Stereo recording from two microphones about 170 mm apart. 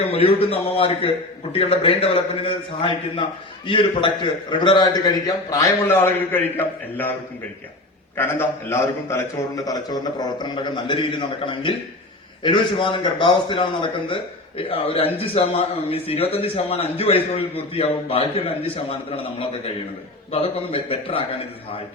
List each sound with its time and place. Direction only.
0.1 s a man's voice: 35° left (ahead or behind); by 7.1 s 10° left (ahead or behind)
8.1 s a man's voice: 15° left (ahead or behind); by 21.4 s 35° left (ahead or behind)